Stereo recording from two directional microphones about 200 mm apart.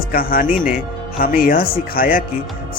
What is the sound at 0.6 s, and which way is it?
Speech, 5° right (ahead or behind).